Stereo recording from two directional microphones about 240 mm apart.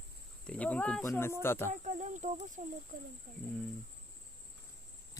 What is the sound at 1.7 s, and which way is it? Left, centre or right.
Speech, right.